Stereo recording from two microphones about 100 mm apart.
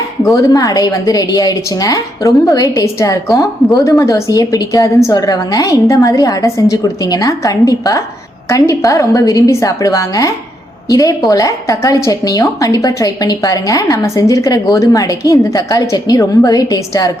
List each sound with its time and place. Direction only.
0.2 s a woman's voice: 35° left (ahead or behind)